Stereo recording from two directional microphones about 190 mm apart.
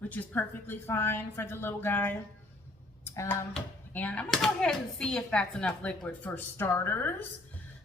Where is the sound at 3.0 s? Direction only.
15° left (ahead or behind).